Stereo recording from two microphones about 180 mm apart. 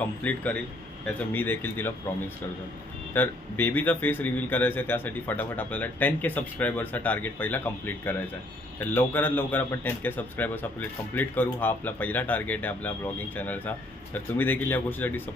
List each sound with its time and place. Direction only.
0.0 s a man's voice: 10° left (ahead or behind)
3.1 s a man's voice: 10° left (ahead or behind)